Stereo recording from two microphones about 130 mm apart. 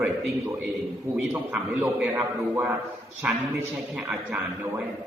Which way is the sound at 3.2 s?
10° right (ahead or behind).